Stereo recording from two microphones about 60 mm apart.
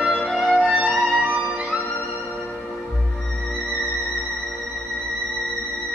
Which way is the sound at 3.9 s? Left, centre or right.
Left.